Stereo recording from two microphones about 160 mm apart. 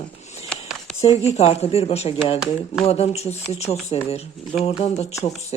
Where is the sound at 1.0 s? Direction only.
40° left (ahead or behind).